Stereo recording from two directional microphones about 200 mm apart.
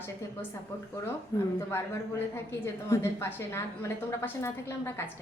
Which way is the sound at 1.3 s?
15° left (ahead or behind).